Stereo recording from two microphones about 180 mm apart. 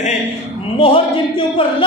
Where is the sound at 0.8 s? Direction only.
30° left (ahead or behind).